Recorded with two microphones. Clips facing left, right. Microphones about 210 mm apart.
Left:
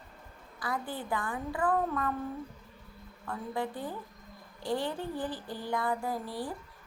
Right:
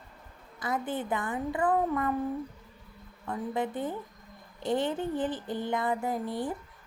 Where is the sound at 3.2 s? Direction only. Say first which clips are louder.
Right 3 dB; 20° right (ahead or behind).